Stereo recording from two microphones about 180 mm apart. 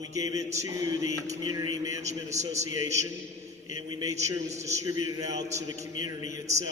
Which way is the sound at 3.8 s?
25° right (ahead or behind).